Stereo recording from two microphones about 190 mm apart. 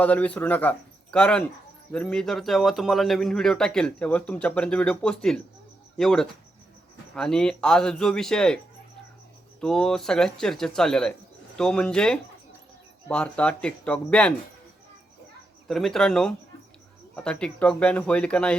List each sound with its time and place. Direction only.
0.0 s speech: 5° left (ahead or behind)
9.6 s speech: 5° left (ahead or behind)
15.6 s speech: centre (ahead or behind)